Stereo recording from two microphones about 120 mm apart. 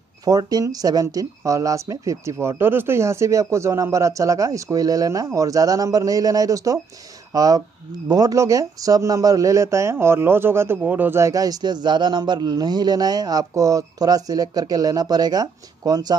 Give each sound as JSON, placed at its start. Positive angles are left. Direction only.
{"t": 0.2, "sound": "a man's voice", "side_deg": -30}